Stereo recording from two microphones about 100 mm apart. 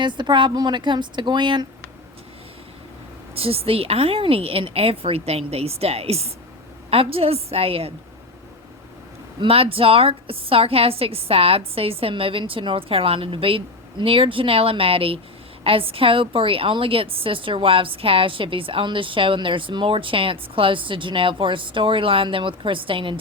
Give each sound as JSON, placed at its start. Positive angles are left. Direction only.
{"t": 0.0, "sound": "speech", "side_deg": -50}
{"t": 3.3, "sound": "a woman's voice", "side_deg": -75}
{"t": 6.9, "sound": "a woman's voice", "side_deg": -75}
{"t": 9.4, "sound": "a woman's voice", "side_deg": -70}